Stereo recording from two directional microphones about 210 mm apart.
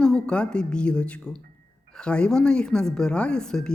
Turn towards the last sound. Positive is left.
turn(degrees=5)  # may be behind; listen again after turning